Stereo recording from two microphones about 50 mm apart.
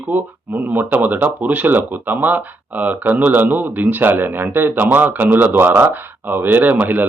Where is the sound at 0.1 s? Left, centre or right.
Right.